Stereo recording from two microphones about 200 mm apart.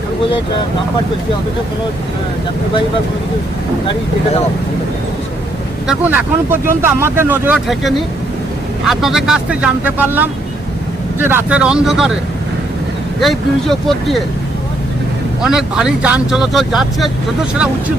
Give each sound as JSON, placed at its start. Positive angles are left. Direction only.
{"t": 5.9, "sound": "speech", "side_deg": -10}
{"t": 13.1, "sound": "speech", "side_deg": 0}
{"t": 15.4, "sound": "speech", "side_deg": -5}